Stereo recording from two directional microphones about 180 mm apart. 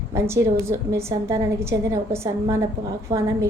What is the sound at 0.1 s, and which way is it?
A woman's voice, 15° right (ahead or behind).